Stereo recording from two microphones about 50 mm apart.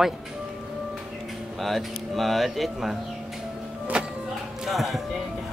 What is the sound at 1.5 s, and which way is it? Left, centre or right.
Speech, centre.